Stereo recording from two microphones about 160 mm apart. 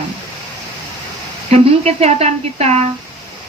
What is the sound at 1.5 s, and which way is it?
A woman's voice, 40° right (ahead or behind).